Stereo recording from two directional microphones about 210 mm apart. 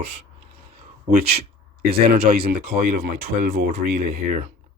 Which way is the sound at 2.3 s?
45° right (ahead or behind).